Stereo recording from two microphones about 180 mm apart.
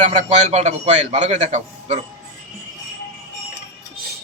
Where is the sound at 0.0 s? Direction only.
40° right (ahead or behind).